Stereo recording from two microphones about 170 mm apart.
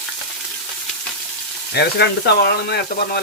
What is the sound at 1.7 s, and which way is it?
Speech, 75° left (ahead or behind).